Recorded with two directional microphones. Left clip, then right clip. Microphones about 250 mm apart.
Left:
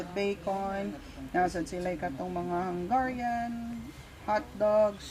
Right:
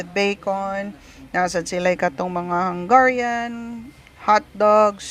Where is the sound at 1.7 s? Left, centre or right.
Right.